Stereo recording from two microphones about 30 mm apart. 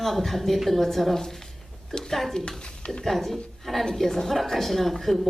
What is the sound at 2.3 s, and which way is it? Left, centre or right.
Speech, left.